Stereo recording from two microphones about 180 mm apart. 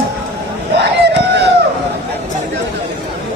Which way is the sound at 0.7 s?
70° right (ahead or behind).